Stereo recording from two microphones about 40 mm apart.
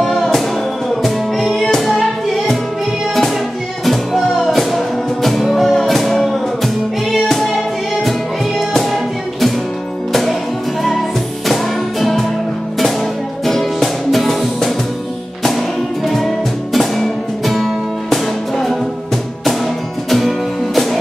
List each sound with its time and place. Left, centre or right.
0.0 s music: centre
3.8 s music: centre
10.8 s music: centre
13.5 s music: centre
16.7 s music: centre
20.1 s music: centre